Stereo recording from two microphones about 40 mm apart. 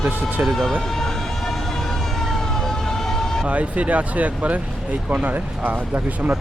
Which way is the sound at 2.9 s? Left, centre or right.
Centre.